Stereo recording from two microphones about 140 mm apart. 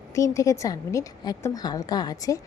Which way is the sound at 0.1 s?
20° left (ahead or behind).